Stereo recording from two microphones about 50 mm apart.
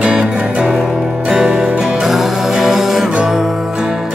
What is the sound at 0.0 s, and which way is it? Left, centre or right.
Music, right.